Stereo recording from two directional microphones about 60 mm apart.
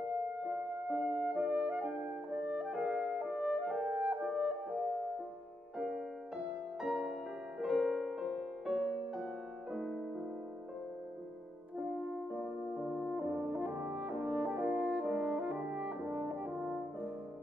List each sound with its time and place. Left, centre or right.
0.1 s music: right
2.8 s music: centre; by 4.6 s right
5.8 s music: centre
12.1 s music: centre
13.1 s french horn: right